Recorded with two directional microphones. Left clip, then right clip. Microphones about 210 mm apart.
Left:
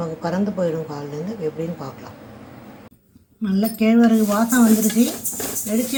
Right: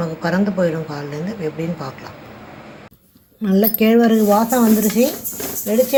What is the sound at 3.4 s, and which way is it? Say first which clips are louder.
Speech: right 5 dB; 35° right (ahead or behind).